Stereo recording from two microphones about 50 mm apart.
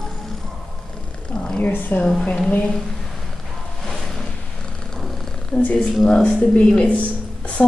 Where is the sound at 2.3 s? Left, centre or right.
Left.